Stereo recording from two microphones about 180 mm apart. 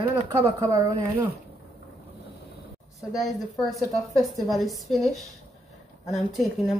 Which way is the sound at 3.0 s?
Centre (ahead or behind).